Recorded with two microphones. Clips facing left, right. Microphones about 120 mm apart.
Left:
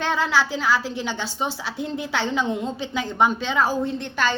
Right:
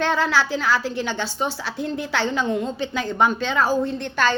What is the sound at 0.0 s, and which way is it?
Speech, 15° left (ahead or behind).